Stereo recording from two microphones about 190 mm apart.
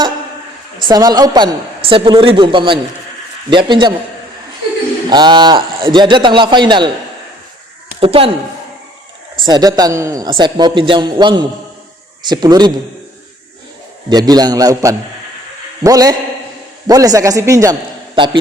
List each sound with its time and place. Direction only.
0.8 s a man's voice: 20° right (ahead or behind)
5.0 s a man's voice: 25° right (ahead or behind)
8.0 s a man's voice: 30° right (ahead or behind)
9.4 s a man's voice: 20° right (ahead or behind)
14.1 s a man's voice: 20° right (ahead or behind)